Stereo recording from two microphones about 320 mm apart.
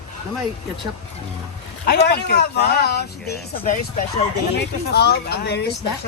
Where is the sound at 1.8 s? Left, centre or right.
Left.